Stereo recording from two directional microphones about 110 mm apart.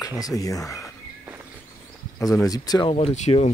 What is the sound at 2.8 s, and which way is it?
Speech, 65° left (ahead or behind).